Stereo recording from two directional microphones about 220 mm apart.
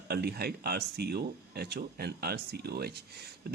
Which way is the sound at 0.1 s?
45° right (ahead or behind).